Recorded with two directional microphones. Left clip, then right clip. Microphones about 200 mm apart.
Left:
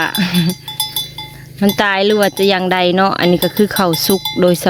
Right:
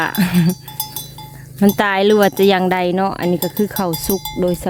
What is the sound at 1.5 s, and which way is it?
Wind chime, 15° right (ahead or behind).